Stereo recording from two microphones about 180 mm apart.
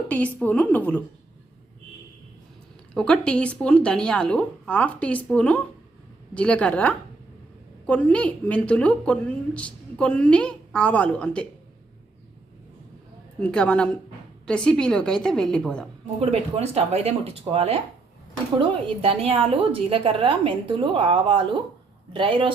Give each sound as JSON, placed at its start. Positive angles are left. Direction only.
{"t": 0.1, "sound": "a woman's voice", "side_deg": 10}
{"t": 2.9, "sound": "a woman's voice", "side_deg": 5}
{"t": 13.4, "sound": "speech", "side_deg": 5}
{"t": 16.2, "sound": "speech", "side_deg": -35}
{"t": 19.0, "sound": "a woman's voice", "side_deg": -35}